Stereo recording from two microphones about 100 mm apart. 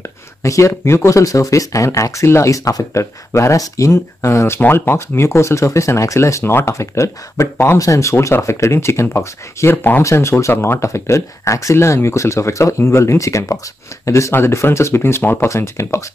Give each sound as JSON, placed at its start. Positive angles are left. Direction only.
{"t": 0.4, "sound": "speech", "side_deg": 30}